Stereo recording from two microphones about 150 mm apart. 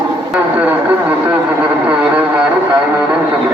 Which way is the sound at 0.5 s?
10° right (ahead or behind).